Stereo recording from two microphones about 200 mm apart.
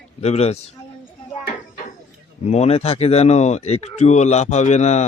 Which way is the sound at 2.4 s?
30° left (ahead or behind).